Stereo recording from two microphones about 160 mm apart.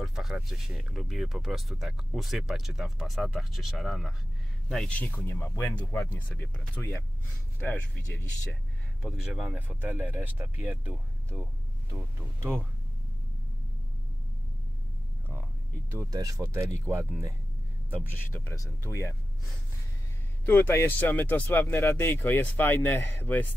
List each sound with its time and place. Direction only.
0.0 s speech: centre (ahead or behind); by 8.5 s 15° left (ahead or behind)
9.0 s speech: centre (ahead or behind)
15.9 s speech: 20° right (ahead or behind)
18.3 s speech: 15° left (ahead or behind)
20.4 s speech: 15° left (ahead or behind)